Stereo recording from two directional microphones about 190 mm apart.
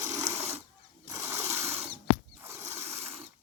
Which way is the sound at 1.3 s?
35° right (ahead or behind).